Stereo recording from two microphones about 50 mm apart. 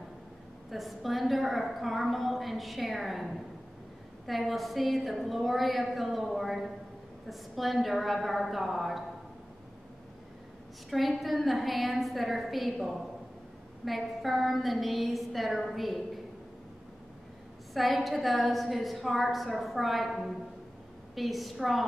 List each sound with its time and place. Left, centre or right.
0.7 s a woman's voice: centre
10.9 s a woman's voice: centre
17.7 s a woman's voice: centre